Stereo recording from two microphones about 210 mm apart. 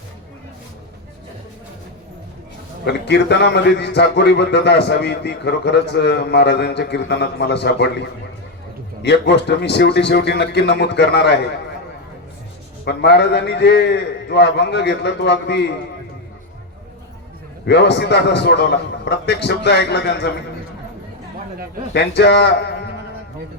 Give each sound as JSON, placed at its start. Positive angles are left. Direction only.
{"t": 2.8, "sound": "a man's voice", "side_deg": 55}
{"t": 12.8, "sound": "a man's voice", "side_deg": 50}
{"t": 17.7, "sound": "a man's voice", "side_deg": 55}
{"t": 21.9, "sound": "a man's voice", "side_deg": 50}